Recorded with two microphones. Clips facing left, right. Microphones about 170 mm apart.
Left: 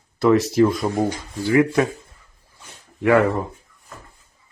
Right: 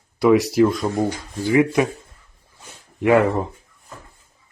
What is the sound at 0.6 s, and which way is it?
Speech, centre (ahead or behind).